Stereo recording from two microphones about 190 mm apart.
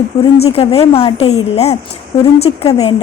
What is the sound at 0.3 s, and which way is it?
A woman's voice, 30° left (ahead or behind).